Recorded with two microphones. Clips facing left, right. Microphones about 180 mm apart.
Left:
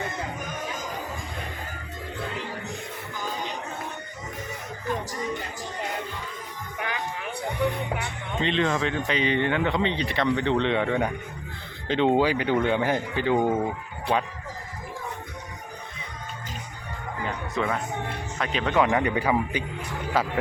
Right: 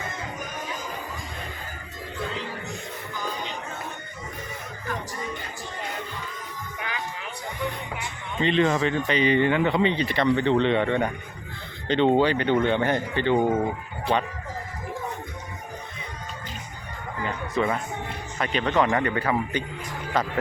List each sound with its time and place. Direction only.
6.7 s music: 55° left (ahead or behind)
8.4 s speech: 5° right (ahead or behind)
17.2 s music: centre (ahead or behind)
18.3 s a man's voice: centre (ahead or behind)